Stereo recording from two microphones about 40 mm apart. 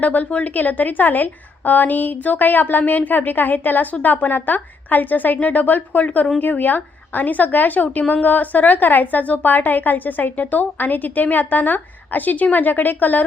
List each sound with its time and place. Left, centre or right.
0.0 s a woman's voice: left
0.5 s a woman's voice: left